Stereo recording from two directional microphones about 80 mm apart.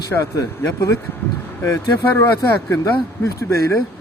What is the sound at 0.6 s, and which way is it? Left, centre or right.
Speech, left.